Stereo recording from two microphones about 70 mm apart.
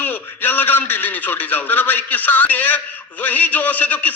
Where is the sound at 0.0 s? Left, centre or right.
Left.